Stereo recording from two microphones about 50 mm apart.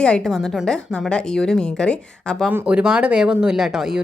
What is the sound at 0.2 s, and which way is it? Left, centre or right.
A woman's voice, centre.